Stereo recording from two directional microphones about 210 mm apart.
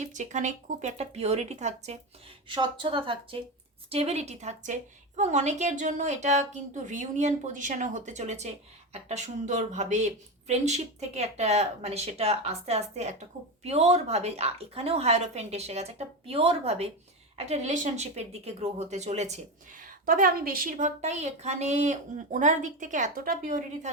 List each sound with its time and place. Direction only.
0.0 s a woman's voice: 35° right (ahead or behind)